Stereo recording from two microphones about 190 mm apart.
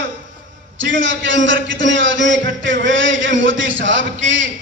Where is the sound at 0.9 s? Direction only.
80° right.